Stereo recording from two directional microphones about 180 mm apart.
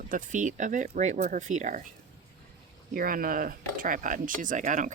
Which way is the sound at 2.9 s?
55° right (ahead or behind).